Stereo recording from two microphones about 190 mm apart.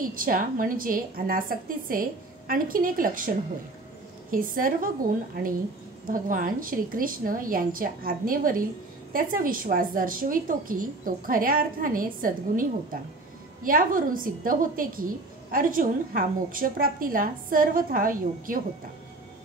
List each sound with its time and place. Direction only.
0.0 s a woman's voice: 45° right (ahead or behind)